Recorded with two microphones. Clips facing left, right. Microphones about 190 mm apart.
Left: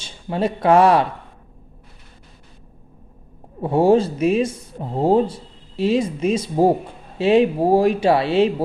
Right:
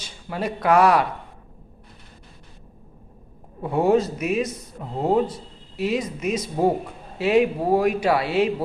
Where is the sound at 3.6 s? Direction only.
30° left (ahead or behind).